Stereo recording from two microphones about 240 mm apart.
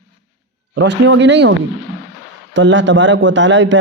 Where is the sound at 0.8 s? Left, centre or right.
Right.